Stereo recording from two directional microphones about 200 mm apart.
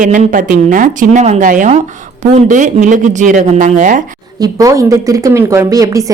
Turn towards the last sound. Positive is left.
turn(degrees=-15)  # may be behind; listen again after turning